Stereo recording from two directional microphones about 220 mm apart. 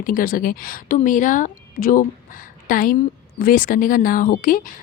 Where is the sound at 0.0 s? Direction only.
40° left (ahead or behind).